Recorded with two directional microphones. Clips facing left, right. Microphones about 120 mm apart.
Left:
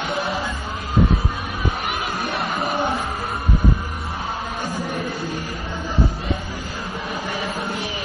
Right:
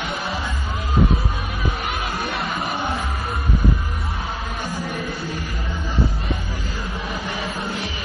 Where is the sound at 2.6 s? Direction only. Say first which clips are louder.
Left 3 dB; centre (ahead or behind).